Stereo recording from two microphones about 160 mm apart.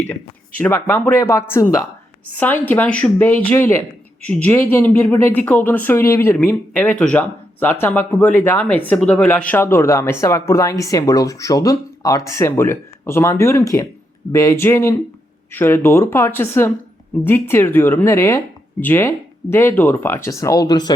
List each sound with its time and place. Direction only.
0.6 s speech: 15° left (ahead or behind)